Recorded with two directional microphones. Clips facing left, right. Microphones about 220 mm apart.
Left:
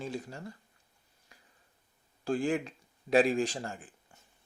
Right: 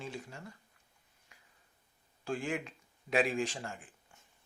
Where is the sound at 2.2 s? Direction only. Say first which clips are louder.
Left 6 dB; 35° left (ahead or behind).